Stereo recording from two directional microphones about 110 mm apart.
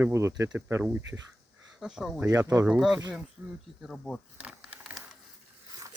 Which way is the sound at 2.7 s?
5° right (ahead or behind).